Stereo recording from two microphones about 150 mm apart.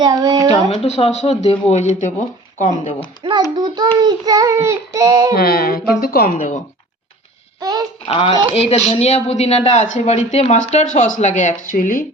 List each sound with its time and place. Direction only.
0.0 s child singing: 25° right (ahead or behind)
0.7 s speech: 40° left (ahead or behind)
3.5 s child singing: 25° right (ahead or behind)
5.3 s speech: 90° left; by 6.6 s 60° left (ahead or behind)
7.6 s child singing: 25° right (ahead or behind)
8.0 s speech: 35° left (ahead or behind); by 12.0 s 65° left (ahead or behind)